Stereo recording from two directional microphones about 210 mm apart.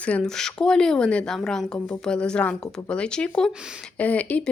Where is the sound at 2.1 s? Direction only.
5° left (ahead or behind).